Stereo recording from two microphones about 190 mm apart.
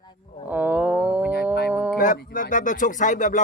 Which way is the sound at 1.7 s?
10° right (ahead or behind).